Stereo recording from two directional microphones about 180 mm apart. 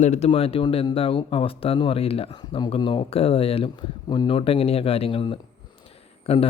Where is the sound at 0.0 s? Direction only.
40° left (ahead or behind).